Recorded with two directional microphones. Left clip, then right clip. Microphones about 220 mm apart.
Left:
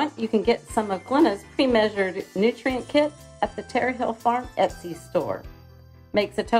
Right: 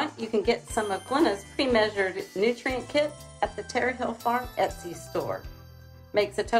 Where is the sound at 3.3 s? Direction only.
35° left (ahead or behind).